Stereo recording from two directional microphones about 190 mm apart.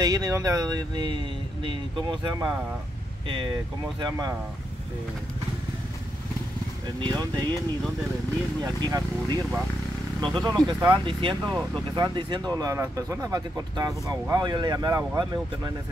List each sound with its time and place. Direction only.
0.0 s speech: 20° right (ahead or behind)
7.1 s speech: 20° right (ahead or behind)
8.6 s speech: 20° right (ahead or behind)
11.4 s speech: 5° left (ahead or behind)
11.9 s speech: 25° right (ahead or behind)